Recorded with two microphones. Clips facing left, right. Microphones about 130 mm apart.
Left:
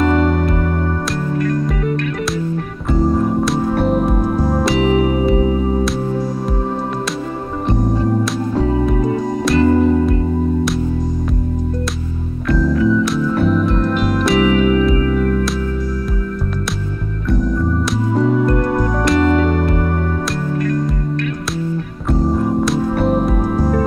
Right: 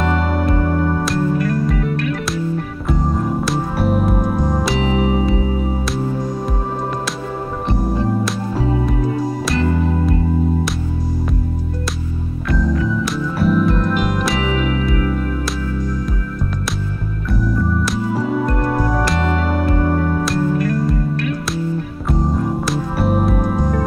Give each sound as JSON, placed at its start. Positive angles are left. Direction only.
{"t": 1.1, "sound": "music", "side_deg": -5}
{"t": 8.8, "sound": "music", "side_deg": 0}
{"t": 12.5, "sound": "music", "side_deg": 0}
{"t": 17.5, "sound": "music", "side_deg": -5}
{"t": 22.7, "sound": "music", "side_deg": -5}